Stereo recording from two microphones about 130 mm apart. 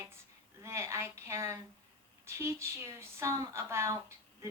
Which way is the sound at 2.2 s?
20° right (ahead or behind).